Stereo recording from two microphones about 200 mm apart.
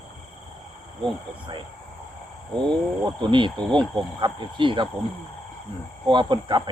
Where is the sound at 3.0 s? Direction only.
25° right (ahead or behind).